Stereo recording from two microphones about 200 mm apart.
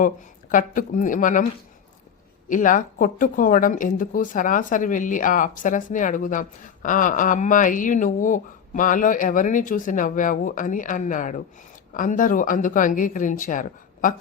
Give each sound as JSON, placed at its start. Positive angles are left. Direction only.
{"t": 0.5, "sound": "speech", "side_deg": 40}
{"t": 2.5, "sound": "speech", "side_deg": 40}